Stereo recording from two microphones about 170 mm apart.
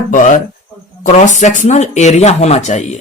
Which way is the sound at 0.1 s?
50° left (ahead or behind).